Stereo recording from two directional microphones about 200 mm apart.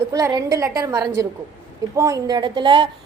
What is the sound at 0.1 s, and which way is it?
A woman's voice, 15° right (ahead or behind).